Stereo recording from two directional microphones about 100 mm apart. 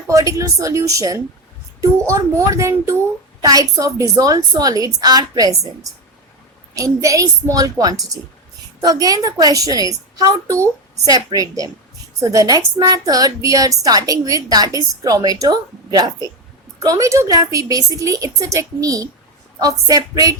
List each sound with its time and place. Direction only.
0.1 s a woman's voice: 35° right (ahead or behind)